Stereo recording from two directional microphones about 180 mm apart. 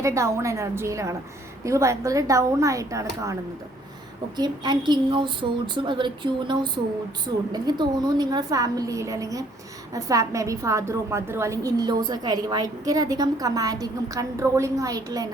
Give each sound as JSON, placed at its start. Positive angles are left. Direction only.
{"t": 0.0, "sound": "a woman's voice", "side_deg": -15}
{"t": 4.4, "sound": "a woman's voice", "side_deg": -25}